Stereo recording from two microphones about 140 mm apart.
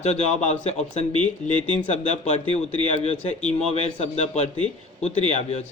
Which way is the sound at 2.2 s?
55° left (ahead or behind).